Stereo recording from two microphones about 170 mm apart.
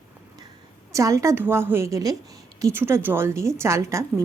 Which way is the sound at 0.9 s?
20° right (ahead or behind).